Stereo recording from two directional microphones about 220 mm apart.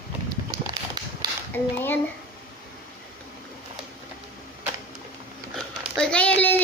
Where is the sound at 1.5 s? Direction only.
10° left (ahead or behind).